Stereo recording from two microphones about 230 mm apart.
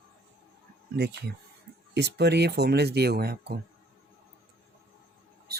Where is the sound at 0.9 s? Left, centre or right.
Right.